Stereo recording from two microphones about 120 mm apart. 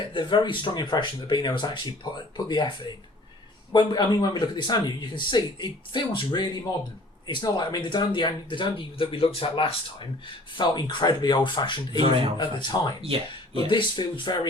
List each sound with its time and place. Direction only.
0.1 s speech: 40° left (ahead or behind)
10.6 s speech: 40° left (ahead or behind)
11.9 s speech: 50° right (ahead or behind)
12.4 s speech: 40° left (ahead or behind)